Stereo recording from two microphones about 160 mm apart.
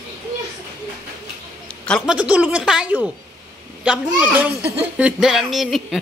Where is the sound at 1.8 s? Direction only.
5° left (ahead or behind).